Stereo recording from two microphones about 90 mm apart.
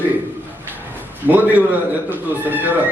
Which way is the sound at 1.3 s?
20° right (ahead or behind).